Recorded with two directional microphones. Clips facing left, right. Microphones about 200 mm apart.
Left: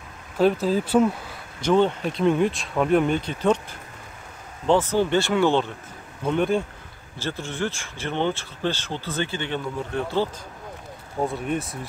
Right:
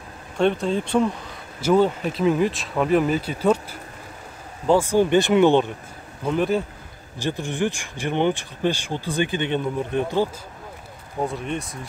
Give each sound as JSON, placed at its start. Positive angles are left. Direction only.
{"t": 0.4, "sound": "speech", "side_deg": 5}
{"t": 1.6, "sound": "speech", "side_deg": -5}
{"t": 4.6, "sound": "speech", "side_deg": -10}
{"t": 6.2, "sound": "speech", "side_deg": 0}
{"t": 7.2, "sound": "speech", "side_deg": -15}
{"t": 11.2, "sound": "speech", "side_deg": 0}